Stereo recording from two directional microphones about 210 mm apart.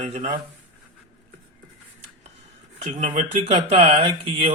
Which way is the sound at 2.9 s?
30° right (ahead or behind).